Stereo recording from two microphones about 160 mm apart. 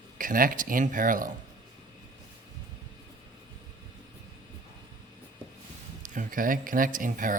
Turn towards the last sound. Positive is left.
turn(degrees=-55)  # may be behind; listen again after turning